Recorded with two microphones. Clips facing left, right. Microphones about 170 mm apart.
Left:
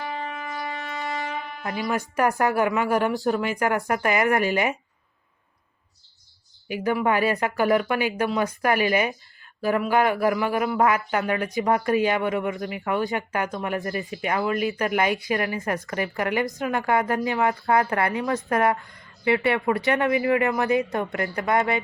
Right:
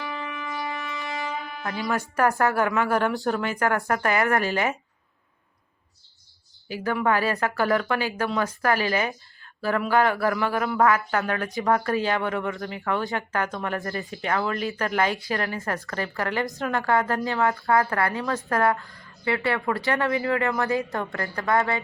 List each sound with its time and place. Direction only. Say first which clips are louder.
0.3 s shofar: even; 40° left (ahead or behind)
2.1 s speech: even; 10° left (ahead or behind)
6.7 s speech: left 1 dB; 15° left (ahead or behind)
13.7 s speech: left 4 dB; 20° left (ahead or behind)
14.0 s speech: left 1 dB; centre (ahead or behind)
14.8 s speech: left 2 dB; 15° left (ahead or behind)